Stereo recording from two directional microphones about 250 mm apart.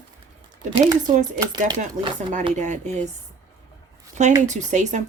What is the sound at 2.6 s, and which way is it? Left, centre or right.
Speech, right.